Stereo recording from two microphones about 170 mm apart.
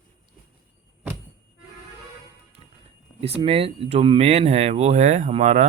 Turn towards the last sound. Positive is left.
turn(degrees=-40)  # may be behind; listen again after turning